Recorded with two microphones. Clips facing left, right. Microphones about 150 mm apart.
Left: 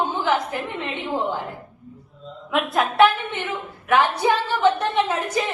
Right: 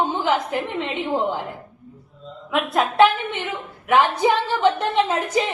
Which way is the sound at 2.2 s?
Centre (ahead or behind).